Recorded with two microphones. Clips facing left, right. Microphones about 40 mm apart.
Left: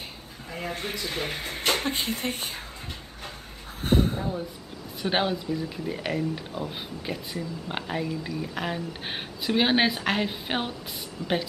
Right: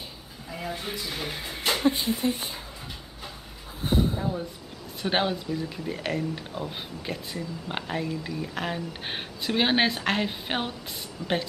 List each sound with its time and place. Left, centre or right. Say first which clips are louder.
1.1 s speech: left 2 dB; left
3.8 s a sound: left 2 dB; left
4.2 s speech: even; centre